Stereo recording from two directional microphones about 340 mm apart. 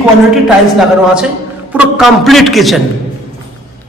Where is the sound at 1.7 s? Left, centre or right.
Centre.